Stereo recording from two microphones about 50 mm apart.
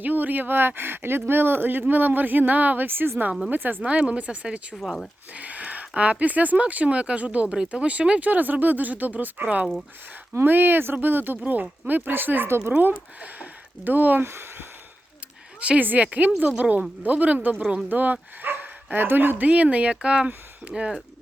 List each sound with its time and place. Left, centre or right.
0.0 s speech: right
3.8 s speech: right
8.3 s speech: right
12.5 s speech: right
12.7 s speech: right
15.8 s speech: right
19.5 s speech: right